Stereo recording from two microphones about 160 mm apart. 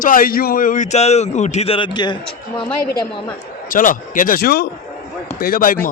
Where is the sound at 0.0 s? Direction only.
60° left (ahead or behind); by 2.1 s 30° left (ahead or behind).